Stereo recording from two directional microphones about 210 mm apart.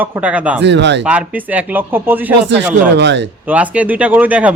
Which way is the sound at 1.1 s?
5° right (ahead or behind).